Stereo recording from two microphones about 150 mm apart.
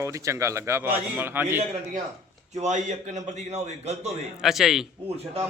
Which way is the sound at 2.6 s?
55° right (ahead or behind).